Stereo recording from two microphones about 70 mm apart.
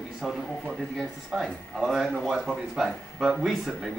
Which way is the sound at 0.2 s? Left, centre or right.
Centre.